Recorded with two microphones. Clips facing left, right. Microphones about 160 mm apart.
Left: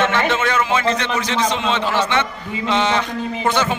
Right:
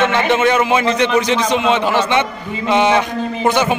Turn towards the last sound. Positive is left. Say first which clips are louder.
# right 4 dB
turn(degrees=-15)  # may be behind; listen again after turning